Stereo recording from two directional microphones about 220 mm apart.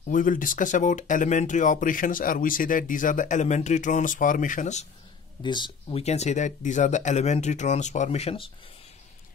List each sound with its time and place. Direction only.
0.0 s speech: 40° left (ahead or behind)
5.4 s speech: 20° left (ahead or behind)